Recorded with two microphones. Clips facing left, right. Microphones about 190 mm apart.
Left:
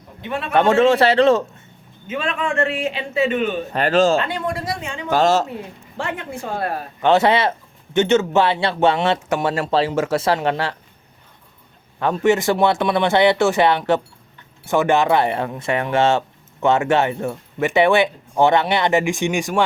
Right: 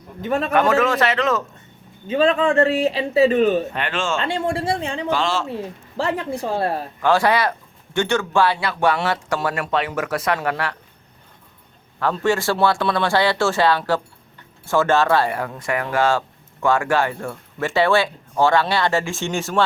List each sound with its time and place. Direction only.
0.2 s a man's voice: 40° right (ahead or behind)
0.5 s a man's voice: 25° left (ahead or behind)
2.0 s a man's voice: 35° right (ahead or behind)
3.7 s a man's voice: 40° left (ahead or behind)
4.2 s speech: 25° right (ahead or behind)
5.0 s speech: 45° left (ahead or behind)
6.0 s a man's voice: 35° right (ahead or behind)
7.0 s speech: 20° left (ahead or behind)
11.9 s speech: 20° left (ahead or behind)